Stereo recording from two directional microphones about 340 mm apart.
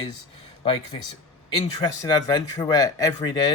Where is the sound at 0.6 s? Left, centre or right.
Centre.